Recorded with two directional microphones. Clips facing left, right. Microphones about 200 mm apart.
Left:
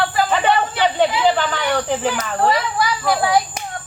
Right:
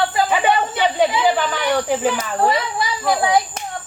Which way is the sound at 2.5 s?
20° right (ahead or behind).